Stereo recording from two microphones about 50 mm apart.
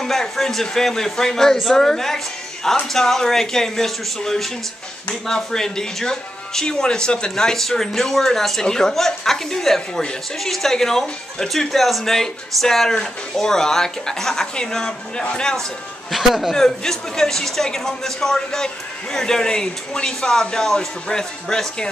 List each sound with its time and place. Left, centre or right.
0.0 s speech: centre
16.1 s a man's voice: centre
16.5 s speech: centre